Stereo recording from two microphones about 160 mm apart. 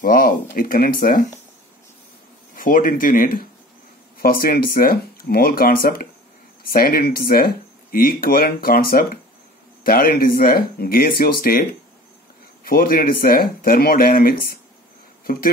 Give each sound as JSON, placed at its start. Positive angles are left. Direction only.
{"t": 0.0, "sound": "speech", "side_deg": 60}
{"t": 2.5, "sound": "speech", "side_deg": 60}
{"t": 12.6, "sound": "speech", "side_deg": 65}